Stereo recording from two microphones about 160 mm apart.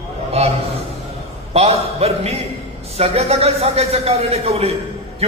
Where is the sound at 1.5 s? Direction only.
40° right (ahead or behind).